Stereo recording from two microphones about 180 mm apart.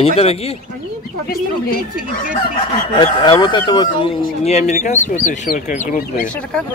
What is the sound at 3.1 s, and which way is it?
Speech, 25° left (ahead or behind).